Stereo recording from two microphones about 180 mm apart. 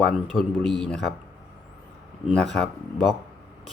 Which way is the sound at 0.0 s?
Centre (ahead or behind).